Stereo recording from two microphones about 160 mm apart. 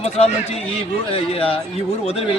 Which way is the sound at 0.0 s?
40° left (ahead or behind).